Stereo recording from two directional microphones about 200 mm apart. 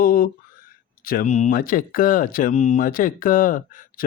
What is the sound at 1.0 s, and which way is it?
Speech, 45° left (ahead or behind).